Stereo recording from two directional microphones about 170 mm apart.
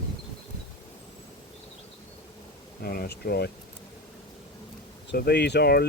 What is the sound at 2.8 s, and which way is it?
Speech, 65° left (ahead or behind).